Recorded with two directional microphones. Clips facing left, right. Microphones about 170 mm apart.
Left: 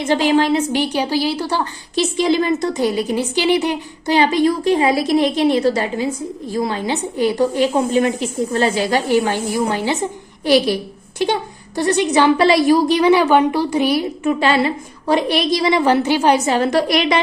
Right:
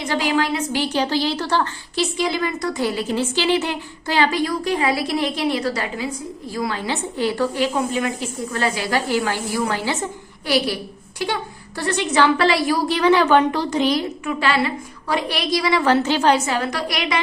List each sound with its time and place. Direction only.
0.0 s a woman's voice: 25° left (ahead or behind)
2.0 s a woman's voice: 25° left (ahead or behind)
14.3 s a woman's voice: 25° left (ahead or behind)
16.5 s a woman's voice: 30° left (ahead or behind)